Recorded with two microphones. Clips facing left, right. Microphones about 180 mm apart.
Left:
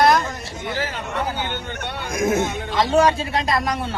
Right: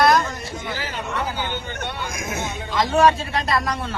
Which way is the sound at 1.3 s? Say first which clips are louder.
Left 1 dB; 60° left (ahead or behind).